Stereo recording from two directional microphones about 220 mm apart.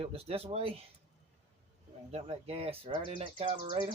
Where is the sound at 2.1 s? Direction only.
25° right (ahead or behind).